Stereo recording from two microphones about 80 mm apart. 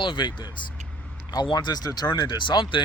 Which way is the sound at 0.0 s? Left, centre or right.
Left.